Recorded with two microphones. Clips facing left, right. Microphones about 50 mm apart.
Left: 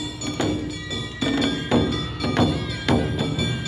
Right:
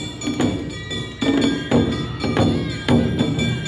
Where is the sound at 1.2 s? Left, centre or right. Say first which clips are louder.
Right 5 dB; centre.